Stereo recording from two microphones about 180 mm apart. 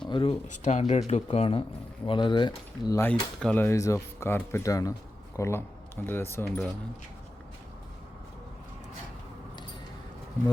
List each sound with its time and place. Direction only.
0.1 s speech: 30° left (ahead or behind)
3.1 s speech: 10° left (ahead or behind)